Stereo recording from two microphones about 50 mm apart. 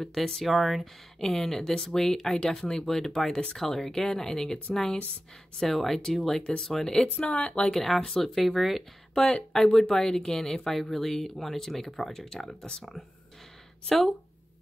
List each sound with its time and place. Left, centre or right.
0.0 s speech: centre
5.6 s speech: centre
7.2 s speech: left
7.7 s speech: centre
9.1 s speech: centre
13.8 s speech: centre